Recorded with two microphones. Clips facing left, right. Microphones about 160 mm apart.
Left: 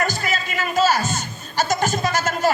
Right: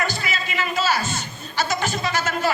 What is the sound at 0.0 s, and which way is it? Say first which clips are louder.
Music: left 3 dB; 45° left (ahead or behind).